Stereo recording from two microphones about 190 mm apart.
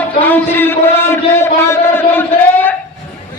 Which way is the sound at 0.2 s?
10° left (ahead or behind).